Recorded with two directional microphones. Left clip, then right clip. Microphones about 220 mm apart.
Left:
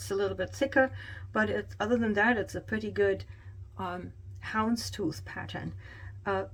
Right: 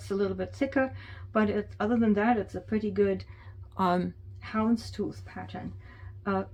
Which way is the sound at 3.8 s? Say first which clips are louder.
Right 10 dB; 50° right (ahead or behind).